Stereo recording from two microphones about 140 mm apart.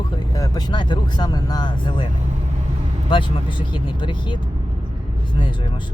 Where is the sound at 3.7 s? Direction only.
35° left (ahead or behind).